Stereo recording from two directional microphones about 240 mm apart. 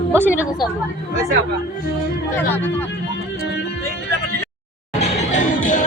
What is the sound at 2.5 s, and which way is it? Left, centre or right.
Speech, centre.